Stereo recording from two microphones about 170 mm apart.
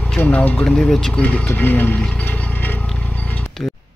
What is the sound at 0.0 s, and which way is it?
Speech, 10° left (ahead or behind).